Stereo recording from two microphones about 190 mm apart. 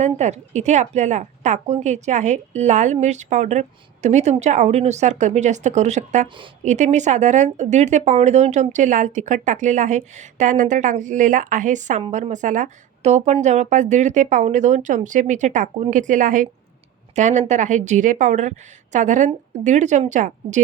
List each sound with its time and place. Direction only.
0.0 s a woman's voice: 35° right (ahead or behind)